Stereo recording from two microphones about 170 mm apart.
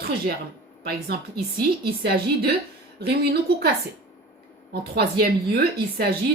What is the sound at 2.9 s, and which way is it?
Speech, 70° right (ahead or behind).